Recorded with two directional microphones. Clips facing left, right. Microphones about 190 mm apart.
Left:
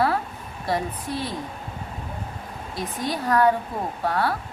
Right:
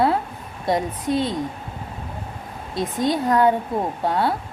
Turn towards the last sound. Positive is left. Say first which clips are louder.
# right 3 dB
turn(degrees=-25)  # may be behind; listen again after turning